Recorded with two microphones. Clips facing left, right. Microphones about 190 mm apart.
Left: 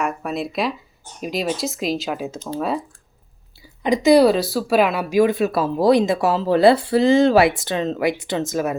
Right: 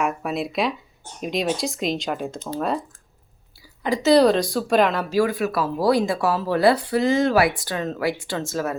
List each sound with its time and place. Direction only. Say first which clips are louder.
0.0 s speech: even; centre (ahead or behind)
3.8 s speech: left 3 dB; 15° left (ahead or behind)